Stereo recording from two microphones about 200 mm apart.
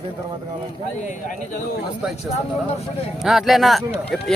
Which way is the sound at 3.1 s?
Centre (ahead or behind).